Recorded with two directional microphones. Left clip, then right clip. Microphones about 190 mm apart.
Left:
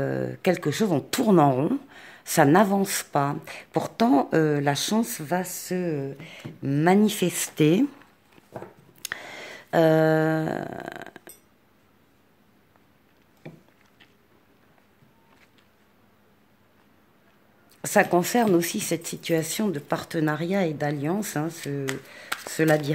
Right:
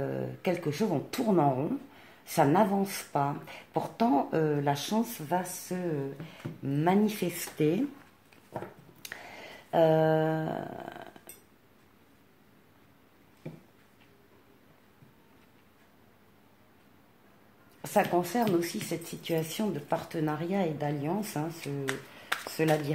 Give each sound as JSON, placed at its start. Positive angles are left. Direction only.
{"t": 0.0, "sound": "speech", "side_deg": 55}
{"t": 9.0, "sound": "a sound", "side_deg": 50}
{"t": 17.8, "sound": "speech", "side_deg": 50}